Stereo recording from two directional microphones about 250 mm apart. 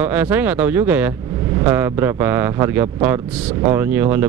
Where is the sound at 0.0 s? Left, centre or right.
Centre.